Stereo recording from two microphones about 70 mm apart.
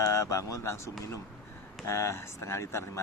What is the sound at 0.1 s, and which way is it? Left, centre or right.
Speech, left.